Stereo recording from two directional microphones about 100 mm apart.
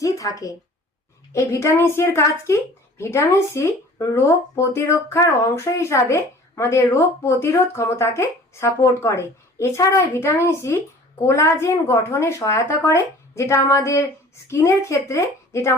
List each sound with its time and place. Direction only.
0.0 s a woman's voice: 35° left (ahead or behind)